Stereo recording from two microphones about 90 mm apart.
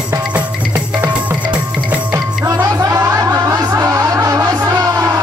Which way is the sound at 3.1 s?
45° right (ahead or behind).